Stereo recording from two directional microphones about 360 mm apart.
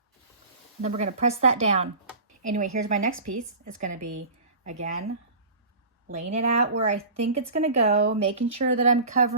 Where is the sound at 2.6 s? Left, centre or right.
Right.